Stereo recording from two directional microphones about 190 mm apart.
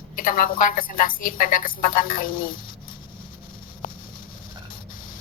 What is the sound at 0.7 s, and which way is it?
A woman's voice, 45° left (ahead or behind).